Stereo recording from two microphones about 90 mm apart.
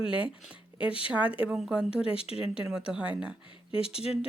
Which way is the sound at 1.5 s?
5° right (ahead or behind).